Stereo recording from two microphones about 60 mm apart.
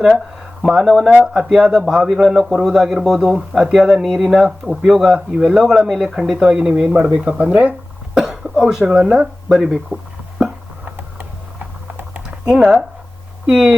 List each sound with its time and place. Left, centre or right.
0.6 s speech: centre; by 7.7 s right
8.1 s cough: centre
8.9 s speech: centre
12.5 s speech: centre